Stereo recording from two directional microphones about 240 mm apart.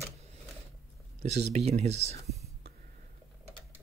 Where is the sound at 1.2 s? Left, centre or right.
Right.